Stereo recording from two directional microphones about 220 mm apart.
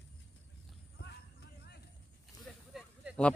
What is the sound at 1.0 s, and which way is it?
Clip-clop, 45° left (ahead or behind).